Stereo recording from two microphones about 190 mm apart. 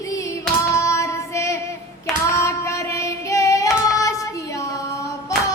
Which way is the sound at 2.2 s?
15° left (ahead or behind).